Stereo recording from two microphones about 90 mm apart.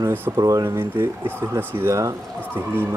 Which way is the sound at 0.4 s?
35° right (ahead or behind).